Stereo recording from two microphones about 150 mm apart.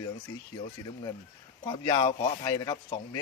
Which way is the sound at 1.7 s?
30° left (ahead or behind).